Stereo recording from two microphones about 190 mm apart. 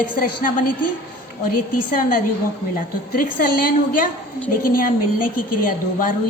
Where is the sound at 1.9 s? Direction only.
45° left (ahead or behind).